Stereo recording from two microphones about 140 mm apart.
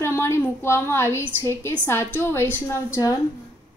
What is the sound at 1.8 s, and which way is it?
A woman's voice, 15° left (ahead or behind).